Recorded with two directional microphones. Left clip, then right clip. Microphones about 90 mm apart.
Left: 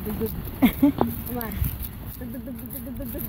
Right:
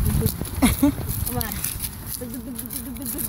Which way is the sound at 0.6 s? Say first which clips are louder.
Even; 10° left (ahead or behind).